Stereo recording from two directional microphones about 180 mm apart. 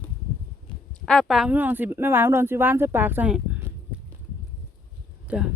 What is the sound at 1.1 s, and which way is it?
Speech, centre (ahead or behind).